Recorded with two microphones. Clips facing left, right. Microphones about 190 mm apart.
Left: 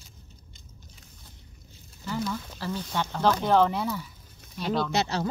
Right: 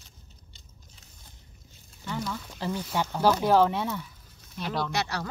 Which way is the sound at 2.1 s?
5° left (ahead or behind).